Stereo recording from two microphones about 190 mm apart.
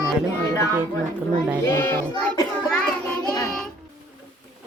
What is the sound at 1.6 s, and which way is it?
Child singing, 15° left (ahead or behind).